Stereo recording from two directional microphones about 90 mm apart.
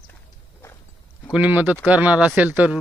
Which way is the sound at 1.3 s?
15° right (ahead or behind).